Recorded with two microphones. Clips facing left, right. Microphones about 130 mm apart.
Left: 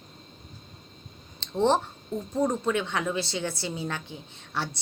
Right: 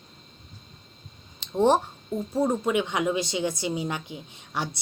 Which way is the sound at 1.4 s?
15° right (ahead or behind).